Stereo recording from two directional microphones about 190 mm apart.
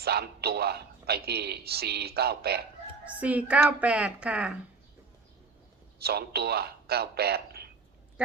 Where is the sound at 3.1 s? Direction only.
5° right (ahead or behind).